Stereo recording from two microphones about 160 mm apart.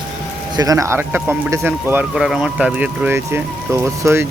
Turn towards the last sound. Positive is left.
turn(degrees=-15)  # may be behind; listen again after turning